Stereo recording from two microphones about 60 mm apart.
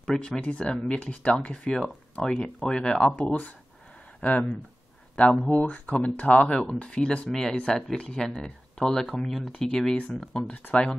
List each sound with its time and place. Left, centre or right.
0.4 s speech: centre
3.2 s speech: left; by 9.9 s centre
9.9 s speech: centre